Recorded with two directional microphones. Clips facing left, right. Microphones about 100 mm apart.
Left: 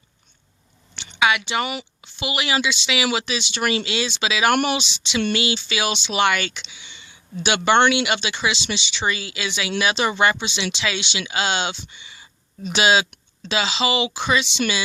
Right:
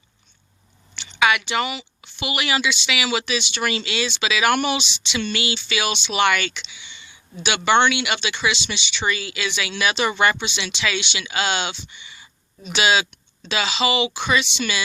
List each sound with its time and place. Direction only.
0.9 s a sound: 25° left (ahead or behind)
1.6 s speech: 50° left (ahead or behind)
2.0 s speech: 25° left (ahead or behind)